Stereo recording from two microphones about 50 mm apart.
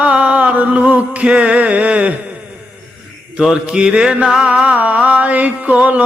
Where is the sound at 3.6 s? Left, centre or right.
Centre.